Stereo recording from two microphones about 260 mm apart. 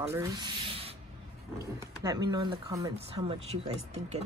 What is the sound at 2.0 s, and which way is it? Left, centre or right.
Speech, centre.